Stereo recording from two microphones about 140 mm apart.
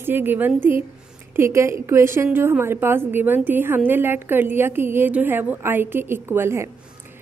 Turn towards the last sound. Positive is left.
turn(degrees=-20)  # may be behind; listen again after turning